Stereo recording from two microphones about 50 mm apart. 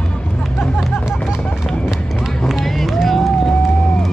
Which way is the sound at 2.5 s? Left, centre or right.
Centre.